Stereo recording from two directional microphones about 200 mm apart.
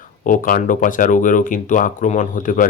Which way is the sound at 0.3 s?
40° left (ahead or behind).